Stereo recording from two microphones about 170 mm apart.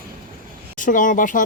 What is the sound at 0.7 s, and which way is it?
Speech, 50° left (ahead or behind).